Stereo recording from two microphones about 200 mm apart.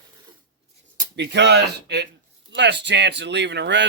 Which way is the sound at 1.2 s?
60° right (ahead or behind).